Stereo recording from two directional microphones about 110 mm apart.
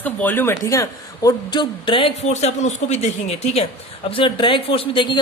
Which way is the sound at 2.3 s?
85° left.